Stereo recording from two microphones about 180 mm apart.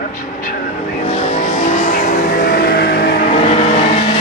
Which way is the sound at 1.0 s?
40° left (ahead or behind).